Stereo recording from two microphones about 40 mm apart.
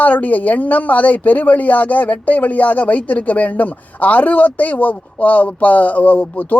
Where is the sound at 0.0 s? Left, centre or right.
Left.